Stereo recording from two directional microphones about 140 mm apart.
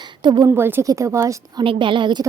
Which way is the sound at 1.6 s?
35° right (ahead or behind).